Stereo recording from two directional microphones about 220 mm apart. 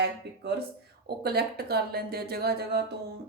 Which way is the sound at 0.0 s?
45° right (ahead or behind).